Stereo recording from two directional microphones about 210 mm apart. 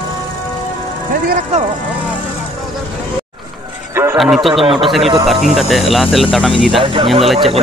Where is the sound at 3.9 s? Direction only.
10° right (ahead or behind).